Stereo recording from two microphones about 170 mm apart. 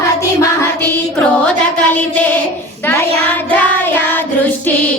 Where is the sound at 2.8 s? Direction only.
10° left (ahead or behind).